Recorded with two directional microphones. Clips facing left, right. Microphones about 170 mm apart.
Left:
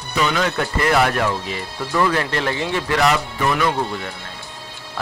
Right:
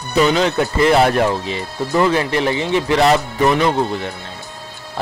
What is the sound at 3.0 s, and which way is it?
Speech, 35° right (ahead or behind).